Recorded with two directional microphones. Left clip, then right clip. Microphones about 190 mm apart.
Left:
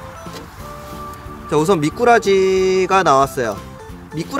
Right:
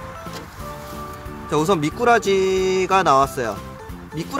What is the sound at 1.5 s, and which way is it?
Speech, 15° left (ahead or behind).